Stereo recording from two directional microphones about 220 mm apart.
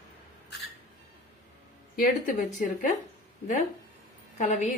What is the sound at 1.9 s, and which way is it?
Speech, 40° left (ahead or behind).